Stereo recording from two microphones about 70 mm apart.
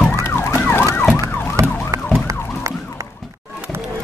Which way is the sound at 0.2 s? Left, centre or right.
Left.